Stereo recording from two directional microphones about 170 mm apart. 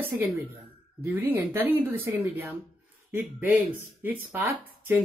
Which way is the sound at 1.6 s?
15° right (ahead or behind).